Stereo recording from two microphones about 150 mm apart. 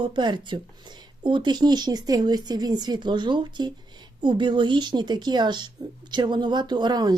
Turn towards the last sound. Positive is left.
turn(degrees=-30)  # may be behind; listen again after turning